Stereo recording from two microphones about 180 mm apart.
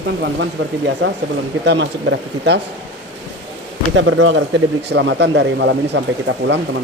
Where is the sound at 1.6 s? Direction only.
70° right (ahead or behind).